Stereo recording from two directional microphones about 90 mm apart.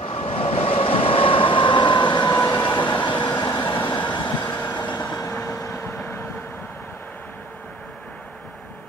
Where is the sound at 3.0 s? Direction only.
60° left (ahead or behind).